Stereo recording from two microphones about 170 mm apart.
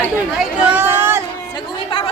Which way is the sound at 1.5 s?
30° left (ahead or behind).